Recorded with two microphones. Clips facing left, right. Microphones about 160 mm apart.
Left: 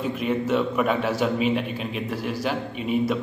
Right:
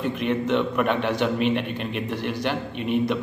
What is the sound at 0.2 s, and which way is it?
A man's voice, 5° left (ahead or behind).